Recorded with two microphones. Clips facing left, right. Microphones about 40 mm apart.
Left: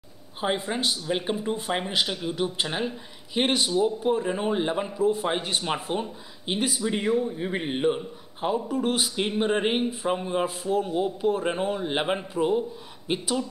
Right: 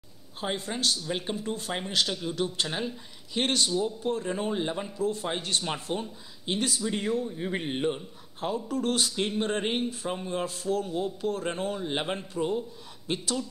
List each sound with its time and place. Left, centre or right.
0.4 s speech: centre